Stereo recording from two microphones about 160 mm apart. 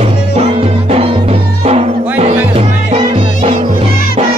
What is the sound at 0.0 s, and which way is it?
Music, 40° right (ahead or behind).